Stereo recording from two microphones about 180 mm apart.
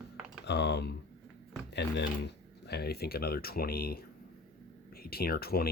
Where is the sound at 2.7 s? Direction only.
60° left (ahead or behind).